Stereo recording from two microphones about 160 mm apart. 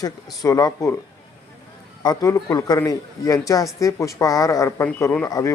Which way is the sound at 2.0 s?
20° left (ahead or behind).